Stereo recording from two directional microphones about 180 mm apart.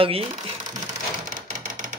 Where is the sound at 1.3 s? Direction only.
45° right (ahead or behind).